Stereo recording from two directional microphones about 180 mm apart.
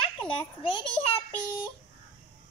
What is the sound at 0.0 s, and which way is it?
Children playing, 25° left (ahead or behind).